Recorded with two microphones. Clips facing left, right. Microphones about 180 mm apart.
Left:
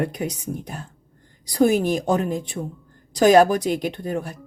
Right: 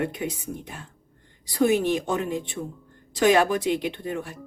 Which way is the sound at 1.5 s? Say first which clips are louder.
Left 3 dB; 40° left (ahead or behind).